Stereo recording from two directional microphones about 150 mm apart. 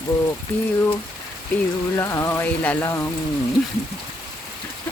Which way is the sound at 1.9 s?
15° left (ahead or behind).